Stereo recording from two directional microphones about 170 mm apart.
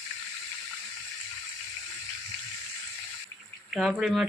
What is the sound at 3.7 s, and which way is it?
Speech, centre (ahead or behind).